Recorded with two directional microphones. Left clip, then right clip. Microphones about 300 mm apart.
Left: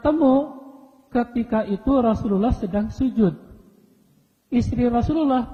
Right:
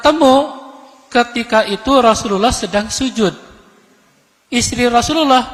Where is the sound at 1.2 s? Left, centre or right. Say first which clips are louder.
Right 11 dB; centre.